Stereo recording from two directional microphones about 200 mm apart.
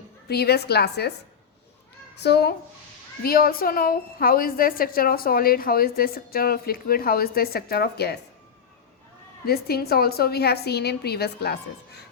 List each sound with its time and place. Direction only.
0.3 s a woman's voice: 55° left (ahead or behind)
2.1 s a woman's voice: 55° left (ahead or behind)
9.5 s a woman's voice: 50° left (ahead or behind)